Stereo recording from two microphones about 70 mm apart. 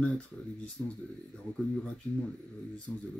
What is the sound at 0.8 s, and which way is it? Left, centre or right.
Speech, left.